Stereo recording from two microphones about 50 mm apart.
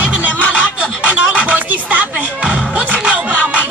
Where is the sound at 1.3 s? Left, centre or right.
Right.